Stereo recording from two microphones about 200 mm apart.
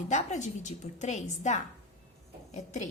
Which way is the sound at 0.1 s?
35° left (ahead or behind).